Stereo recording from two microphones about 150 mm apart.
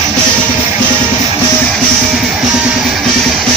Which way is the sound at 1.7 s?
Centre (ahead or behind).